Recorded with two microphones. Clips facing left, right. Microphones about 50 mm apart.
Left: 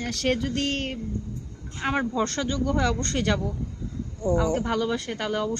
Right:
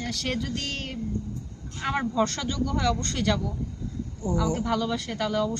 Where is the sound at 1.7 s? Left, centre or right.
Left.